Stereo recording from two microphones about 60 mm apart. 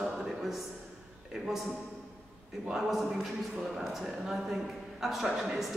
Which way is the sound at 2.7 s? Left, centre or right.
Centre.